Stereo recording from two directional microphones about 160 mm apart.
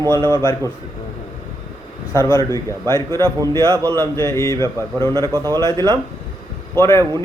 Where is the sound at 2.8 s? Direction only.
20° left (ahead or behind).